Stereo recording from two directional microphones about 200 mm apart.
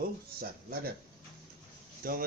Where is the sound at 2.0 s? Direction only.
45° right (ahead or behind).